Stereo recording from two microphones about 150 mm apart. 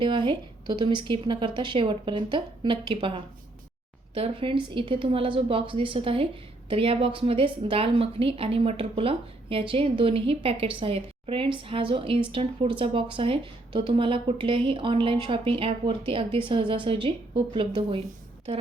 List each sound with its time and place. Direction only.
0.0 s a woman's voice: 30° right (ahead or behind)